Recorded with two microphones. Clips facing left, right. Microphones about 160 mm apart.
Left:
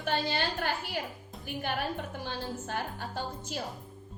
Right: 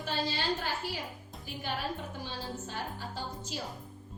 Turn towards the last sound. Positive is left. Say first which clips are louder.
# left 3 dB
turn(degrees=55)  # may be behind; listen again after turning